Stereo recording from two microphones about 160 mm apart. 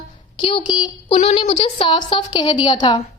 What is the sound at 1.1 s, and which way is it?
A woman's voice, 45° left (ahead or behind).